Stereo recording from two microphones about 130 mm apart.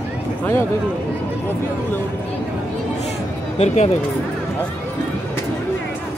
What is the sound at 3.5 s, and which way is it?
Speech, 60° left (ahead or behind).